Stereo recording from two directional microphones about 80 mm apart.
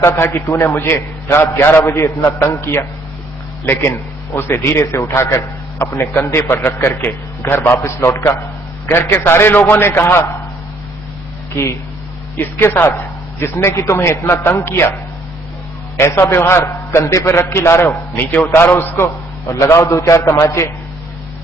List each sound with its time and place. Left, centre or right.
0.0 s a man's voice: left
11.5 s a man's voice: left
12.4 s a man's voice: left
16.0 s a man's voice: left